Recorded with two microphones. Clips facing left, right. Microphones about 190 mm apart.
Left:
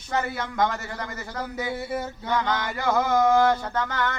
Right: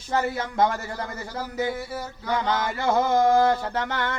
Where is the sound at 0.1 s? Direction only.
30° right (ahead or behind).